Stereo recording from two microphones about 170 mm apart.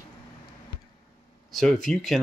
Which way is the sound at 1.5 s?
Centre (ahead or behind).